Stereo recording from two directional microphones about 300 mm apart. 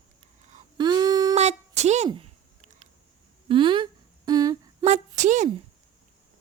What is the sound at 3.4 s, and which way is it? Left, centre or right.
Humming, centre.